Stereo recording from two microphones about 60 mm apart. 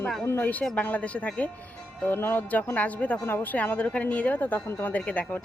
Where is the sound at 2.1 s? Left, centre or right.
Left.